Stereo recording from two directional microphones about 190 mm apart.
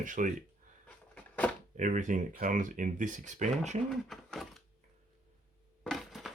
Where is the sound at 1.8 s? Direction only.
40° right (ahead or behind).